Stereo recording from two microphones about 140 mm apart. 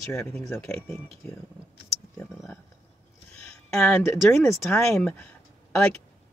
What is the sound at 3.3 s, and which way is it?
Speech, 5° left (ahead or behind).